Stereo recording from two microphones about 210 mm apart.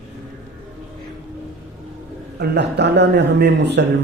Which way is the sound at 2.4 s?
55° right (ahead or behind).